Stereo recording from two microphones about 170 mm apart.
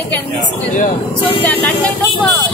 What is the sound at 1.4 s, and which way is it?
Speech, 10° left (ahead or behind).